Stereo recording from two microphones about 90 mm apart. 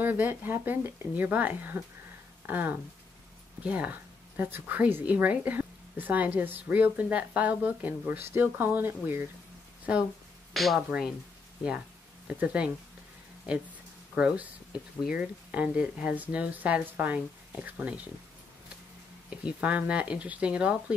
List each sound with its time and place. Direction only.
0.0 s a woman's voice: 20° right (ahead or behind)
10.5 s speech: centre (ahead or behind)
12.3 s speech: 15° right (ahead or behind)
14.1 s speech: 15° right (ahead or behind)
19.4 s speech: 15° right (ahead or behind)